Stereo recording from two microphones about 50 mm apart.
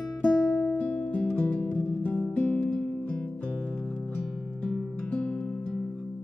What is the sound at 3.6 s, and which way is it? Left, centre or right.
Music, centre.